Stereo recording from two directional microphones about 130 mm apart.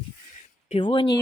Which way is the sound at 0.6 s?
45° left (ahead or behind).